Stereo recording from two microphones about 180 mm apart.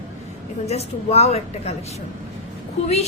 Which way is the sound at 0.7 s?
35° left (ahead or behind).